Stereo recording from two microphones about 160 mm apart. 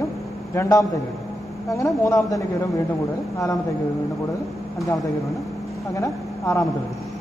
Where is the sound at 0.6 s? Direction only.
20° left (ahead or behind).